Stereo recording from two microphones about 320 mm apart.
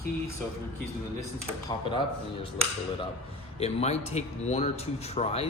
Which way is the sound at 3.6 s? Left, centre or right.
Centre.